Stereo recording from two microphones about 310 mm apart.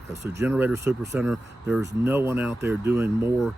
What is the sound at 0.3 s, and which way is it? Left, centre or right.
Speech, centre.